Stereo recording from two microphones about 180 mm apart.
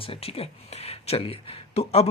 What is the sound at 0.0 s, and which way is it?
Speech, 30° left (ahead or behind).